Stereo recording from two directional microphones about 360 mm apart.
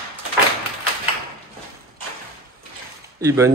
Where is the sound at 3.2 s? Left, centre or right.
Centre.